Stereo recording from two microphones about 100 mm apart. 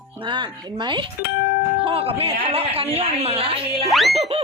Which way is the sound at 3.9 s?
Centre (ahead or behind).